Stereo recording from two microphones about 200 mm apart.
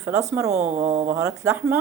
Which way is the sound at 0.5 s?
35° right (ahead or behind).